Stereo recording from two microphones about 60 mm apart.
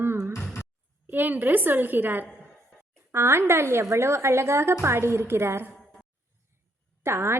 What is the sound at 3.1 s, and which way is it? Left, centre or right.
A woman's voice, right.